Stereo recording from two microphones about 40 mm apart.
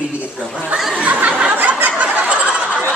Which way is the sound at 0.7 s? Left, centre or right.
Centre.